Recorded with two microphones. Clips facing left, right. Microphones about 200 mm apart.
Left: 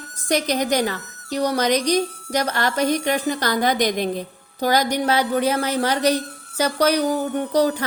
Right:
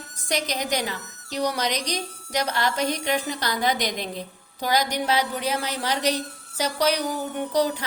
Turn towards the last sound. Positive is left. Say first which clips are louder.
# left 4 dB
turn(degrees=50)  # may be behind; listen again after turning